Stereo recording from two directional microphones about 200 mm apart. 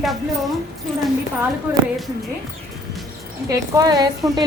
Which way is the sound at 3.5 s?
15° right (ahead or behind).